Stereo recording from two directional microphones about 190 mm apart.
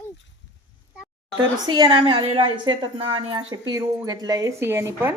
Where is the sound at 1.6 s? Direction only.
20° right (ahead or behind).